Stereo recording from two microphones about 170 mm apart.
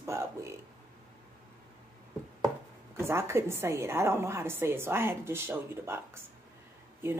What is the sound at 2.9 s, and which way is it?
A woman's voice, 15° right (ahead or behind).